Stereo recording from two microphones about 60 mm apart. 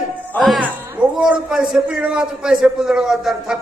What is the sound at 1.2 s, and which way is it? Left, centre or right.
A man's voice, centre.